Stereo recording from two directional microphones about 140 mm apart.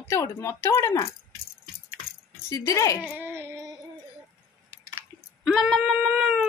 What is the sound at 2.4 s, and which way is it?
Speech, 20° left (ahead or behind).